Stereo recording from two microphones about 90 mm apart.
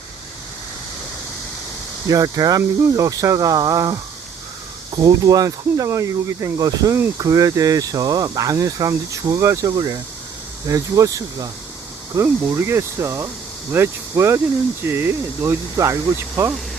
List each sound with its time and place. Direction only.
2.0 s speech: 45° right (ahead or behind)
5.0 s speech: 45° right (ahead or behind)